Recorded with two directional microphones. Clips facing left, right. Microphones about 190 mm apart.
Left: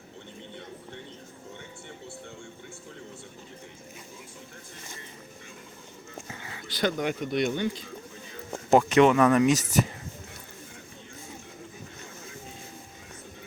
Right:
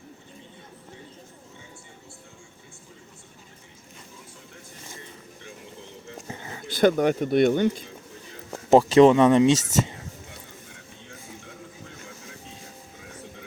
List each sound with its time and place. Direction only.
6.2 s a sound: 35° right (ahead or behind)
6.7 s speech: 50° right (ahead or behind)
8.7 s speech: 30° right (ahead or behind)